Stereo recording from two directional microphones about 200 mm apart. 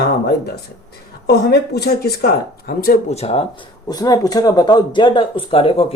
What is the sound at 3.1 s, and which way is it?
Speech, 30° left (ahead or behind).